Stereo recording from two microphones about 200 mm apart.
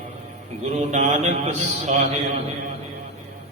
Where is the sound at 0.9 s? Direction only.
35° right (ahead or behind).